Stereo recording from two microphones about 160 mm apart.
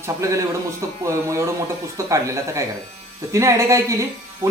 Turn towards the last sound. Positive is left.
turn(degrees=-20)  # may be behind; listen again after turning